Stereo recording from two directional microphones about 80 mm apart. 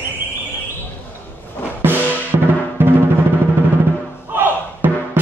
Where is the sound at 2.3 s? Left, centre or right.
Right.